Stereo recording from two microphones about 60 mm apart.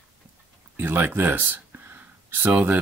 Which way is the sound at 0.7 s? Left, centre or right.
Right.